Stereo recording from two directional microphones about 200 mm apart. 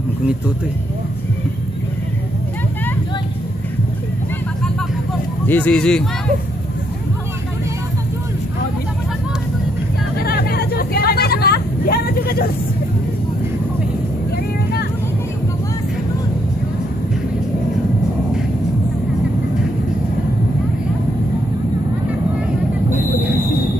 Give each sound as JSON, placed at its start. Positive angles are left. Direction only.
{"t": 5.5, "sound": "speech", "side_deg": 5}
{"t": 10.1, "sound": "vehicle", "side_deg": 50}